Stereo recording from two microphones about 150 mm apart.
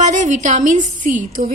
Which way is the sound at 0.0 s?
55° right (ahead or behind).